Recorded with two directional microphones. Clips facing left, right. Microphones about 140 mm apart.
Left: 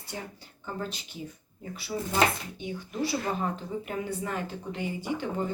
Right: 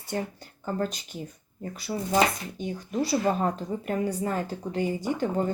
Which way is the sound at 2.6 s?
40° right (ahead or behind).